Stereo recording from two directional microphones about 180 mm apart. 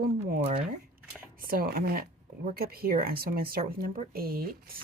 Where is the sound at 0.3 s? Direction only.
50° right (ahead or behind).